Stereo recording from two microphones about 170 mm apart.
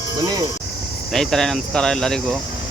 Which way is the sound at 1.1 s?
Centre (ahead or behind).